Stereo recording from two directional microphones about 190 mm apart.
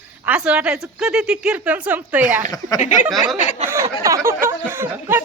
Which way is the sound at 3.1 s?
Centre (ahead or behind).